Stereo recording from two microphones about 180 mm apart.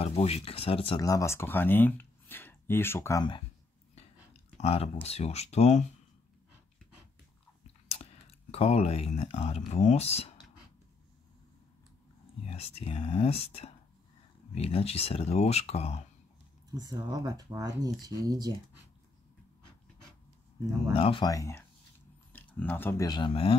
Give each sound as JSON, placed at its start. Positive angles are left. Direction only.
{"t": 0.0, "sound": "speech", "side_deg": 35}
{"t": 1.0, "sound": "speech", "side_deg": 15}
{"t": 4.6, "sound": "speech", "side_deg": 35}
{"t": 7.9, "sound": "speech", "side_deg": 35}
{"t": 12.4, "sound": "speech", "side_deg": 35}
{"t": 16.7, "sound": "speech", "side_deg": -20}
{"t": 20.9, "sound": "speech", "side_deg": 30}